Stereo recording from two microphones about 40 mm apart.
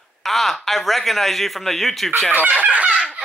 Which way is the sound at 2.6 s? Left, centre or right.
Right.